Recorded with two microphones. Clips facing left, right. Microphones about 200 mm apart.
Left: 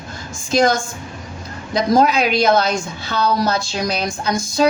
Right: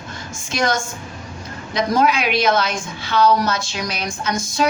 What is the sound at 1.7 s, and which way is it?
Speech, 35° left (ahead or behind).